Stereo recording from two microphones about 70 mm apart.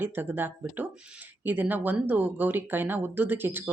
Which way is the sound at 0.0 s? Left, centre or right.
Right.